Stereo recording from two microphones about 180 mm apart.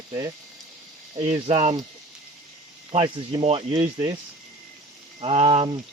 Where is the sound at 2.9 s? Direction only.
30° right (ahead or behind).